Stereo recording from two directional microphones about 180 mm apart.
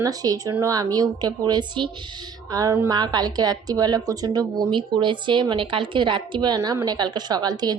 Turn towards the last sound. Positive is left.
turn(degrees=-20)  # may be behind; listen again after turning